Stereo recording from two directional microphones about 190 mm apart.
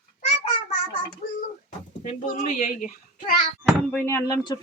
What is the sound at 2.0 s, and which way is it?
Speech, 40° left (ahead or behind).